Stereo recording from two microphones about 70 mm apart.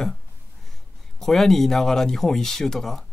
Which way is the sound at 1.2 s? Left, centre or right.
Centre.